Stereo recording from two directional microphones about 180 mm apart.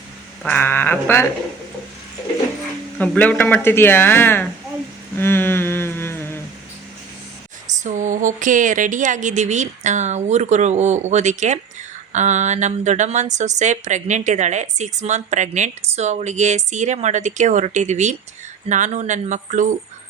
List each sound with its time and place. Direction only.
0.4 s speech: 10° left (ahead or behind)
3.0 s speech: 10° left (ahead or behind)
5.1 s a sound: 10° left (ahead or behind)
7.9 s speech: 45° right (ahead or behind)